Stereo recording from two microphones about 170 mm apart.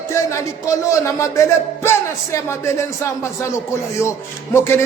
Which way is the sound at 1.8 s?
15° left (ahead or behind).